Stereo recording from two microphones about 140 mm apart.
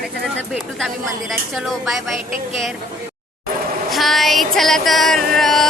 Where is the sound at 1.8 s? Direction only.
Centre (ahead or behind).